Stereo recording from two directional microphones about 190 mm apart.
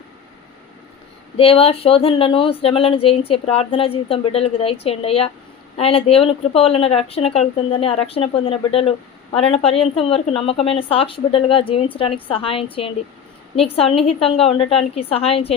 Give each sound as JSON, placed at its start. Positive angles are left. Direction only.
{"t": 1.4, "sound": "a woman's voice", "side_deg": 30}